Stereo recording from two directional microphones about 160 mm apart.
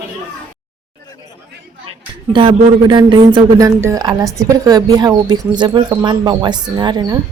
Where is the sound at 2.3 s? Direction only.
30° right (ahead or behind).